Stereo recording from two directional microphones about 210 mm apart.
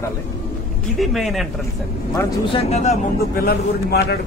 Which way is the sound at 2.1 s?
25° left (ahead or behind).